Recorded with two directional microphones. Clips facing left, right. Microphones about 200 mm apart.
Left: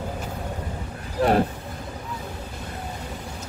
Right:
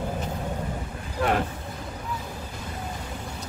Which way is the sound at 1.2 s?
35° left (ahead or behind).